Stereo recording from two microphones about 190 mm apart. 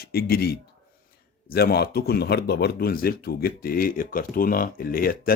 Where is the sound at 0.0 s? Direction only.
55° left (ahead or behind).